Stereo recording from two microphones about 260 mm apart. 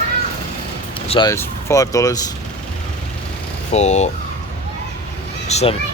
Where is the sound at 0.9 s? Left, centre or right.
Centre.